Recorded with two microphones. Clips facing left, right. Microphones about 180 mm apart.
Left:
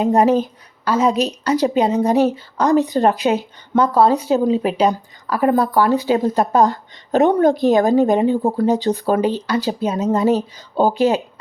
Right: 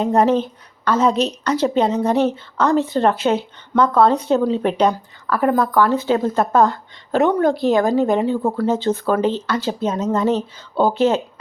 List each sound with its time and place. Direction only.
0.0 s speech: 15° left (ahead or behind)
4.9 s a woman's voice: 15° left (ahead or behind)